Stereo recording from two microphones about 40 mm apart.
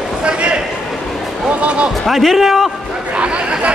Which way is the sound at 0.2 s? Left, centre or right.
Right.